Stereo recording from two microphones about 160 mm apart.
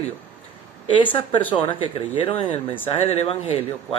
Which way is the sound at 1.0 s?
30° left (ahead or behind).